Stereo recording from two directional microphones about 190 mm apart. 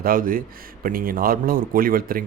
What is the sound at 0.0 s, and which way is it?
Speech, 50° right (ahead or behind).